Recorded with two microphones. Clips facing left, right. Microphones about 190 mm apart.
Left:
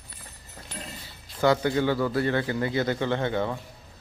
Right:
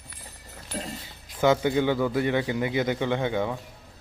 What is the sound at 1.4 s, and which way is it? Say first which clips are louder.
A man's voice: right 1 dB; 15° right (ahead or behind).